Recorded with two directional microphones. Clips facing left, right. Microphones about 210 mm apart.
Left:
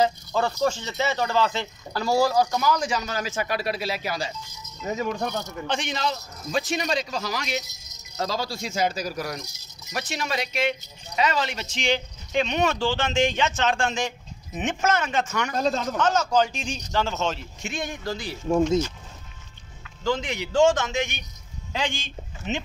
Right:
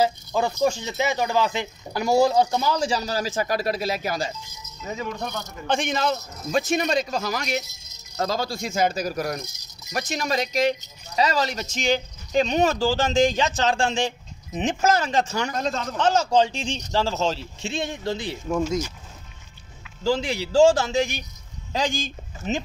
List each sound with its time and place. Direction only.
0.0 s speech: 10° right (ahead or behind); by 4.3 s 45° right (ahead or behind)
5.7 s speech: 50° right (ahead or behind); by 15.5 s 30° right (ahead or behind)
15.5 s a man's voice: 35° left (ahead or behind)
16.0 s speech: 30° right (ahead or behind)
20.0 s speech: 30° right (ahead or behind)